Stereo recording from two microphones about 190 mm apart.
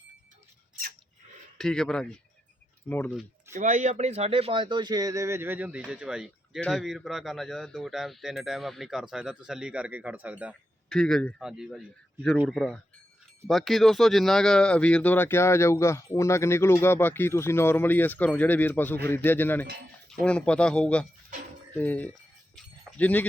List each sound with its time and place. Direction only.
1.5 s a man's voice: centre (ahead or behind)
3.5 s a man's voice: 40° right (ahead or behind); by 22.1 s 10° left (ahead or behind)
22.5 s livestock: 5° left (ahead or behind)